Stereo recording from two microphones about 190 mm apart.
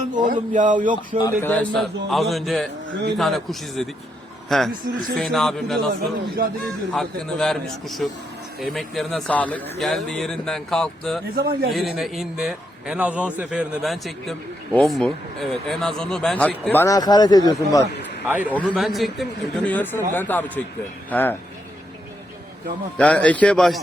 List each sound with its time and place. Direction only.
0.0 s a sound: 40° right (ahead or behind)
0.5 s speech: 45° right (ahead or behind)
1.2 s a man's voice: 10° left (ahead or behind)
6.4 s speech: 55° right (ahead or behind)
6.9 s a man's voice: centre (ahead or behind)
11.3 s speech: 50° right (ahead or behind)
11.7 s a man's voice: centre (ahead or behind); by 17.8 s 20° left (ahead or behind)
18.4 s a man's voice: 5° left (ahead or behind)
23.0 s a man's voice: 5° left (ahead or behind)